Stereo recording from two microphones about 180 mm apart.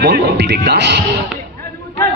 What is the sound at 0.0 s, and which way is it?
Speech, 65° right (ahead or behind).